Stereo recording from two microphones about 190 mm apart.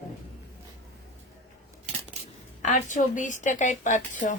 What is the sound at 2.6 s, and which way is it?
A woman's voice, 40° left (ahead or behind).